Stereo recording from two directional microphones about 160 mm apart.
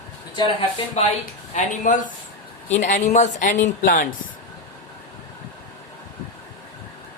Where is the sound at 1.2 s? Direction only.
55° left (ahead or behind).